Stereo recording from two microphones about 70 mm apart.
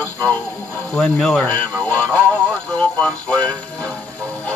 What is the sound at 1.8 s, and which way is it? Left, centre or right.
Music, left.